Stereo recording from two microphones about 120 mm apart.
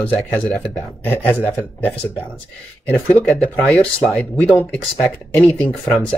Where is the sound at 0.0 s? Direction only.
10° left (ahead or behind).